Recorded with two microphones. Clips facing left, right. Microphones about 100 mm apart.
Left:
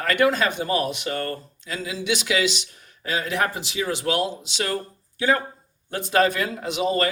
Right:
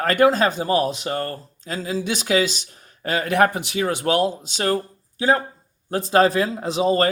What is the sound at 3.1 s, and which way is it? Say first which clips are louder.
Speech: right 6 dB; 55° right (ahead or behind).